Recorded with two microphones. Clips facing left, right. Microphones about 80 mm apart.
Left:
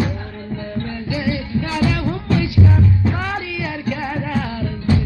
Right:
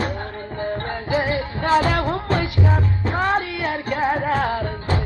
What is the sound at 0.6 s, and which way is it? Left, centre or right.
Music, right.